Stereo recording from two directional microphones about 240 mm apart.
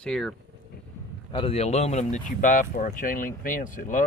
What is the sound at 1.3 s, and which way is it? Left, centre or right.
Speech, left.